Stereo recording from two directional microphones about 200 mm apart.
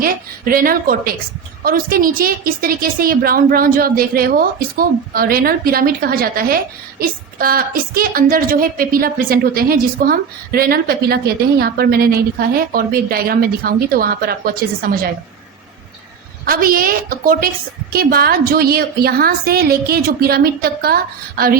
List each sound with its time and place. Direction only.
0.0 s a sound: 45° right (ahead or behind)
1.6 s a woman's voice: 45° right (ahead or behind)
16.5 s a woman's voice: 45° right (ahead or behind)